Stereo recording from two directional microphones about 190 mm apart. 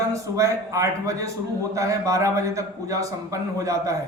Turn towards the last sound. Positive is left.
turn(degrees=-15)  # may be behind; listen again after turning